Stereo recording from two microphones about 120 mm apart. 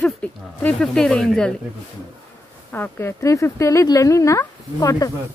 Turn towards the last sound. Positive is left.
turn(degrees=30)  # may be behind; listen again after turning